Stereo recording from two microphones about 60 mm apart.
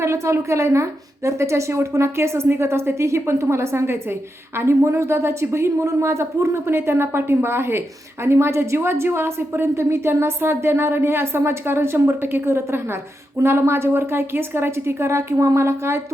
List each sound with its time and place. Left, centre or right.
0.0 s a woman's voice: right